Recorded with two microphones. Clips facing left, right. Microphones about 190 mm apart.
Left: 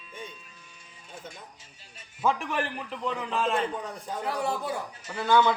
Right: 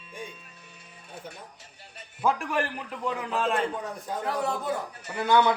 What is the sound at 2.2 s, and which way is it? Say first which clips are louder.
A man's voice: right 1 dB; 10° right (ahead or behind).